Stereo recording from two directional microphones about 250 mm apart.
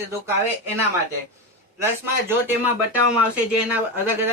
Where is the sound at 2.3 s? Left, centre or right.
Centre.